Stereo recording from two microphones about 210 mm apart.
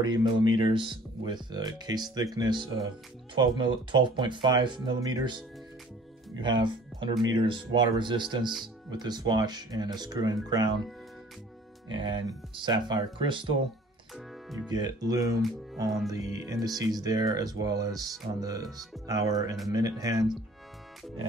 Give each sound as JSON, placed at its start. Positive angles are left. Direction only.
{"t": 0.0, "sound": "speech", "side_deg": -20}
{"t": 6.4, "sound": "speech", "side_deg": -20}
{"t": 11.9, "sound": "speech", "side_deg": -20}
{"t": 14.1, "sound": "music", "side_deg": 0}
{"t": 14.7, "sound": "speech", "side_deg": -20}